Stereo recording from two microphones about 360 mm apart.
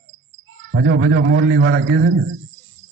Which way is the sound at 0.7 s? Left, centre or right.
Right.